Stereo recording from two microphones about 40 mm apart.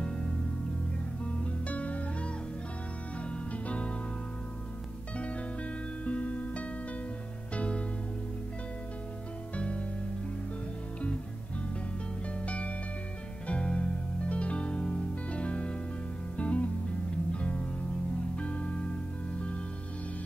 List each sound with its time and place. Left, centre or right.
1.2 s music: left
5.1 s music: left
9.6 s music: left
12.4 s music: left